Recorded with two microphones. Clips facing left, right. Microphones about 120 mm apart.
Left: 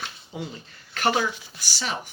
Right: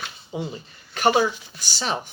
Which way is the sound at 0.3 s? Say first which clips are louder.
Right 7 dB; 15° right (ahead or behind).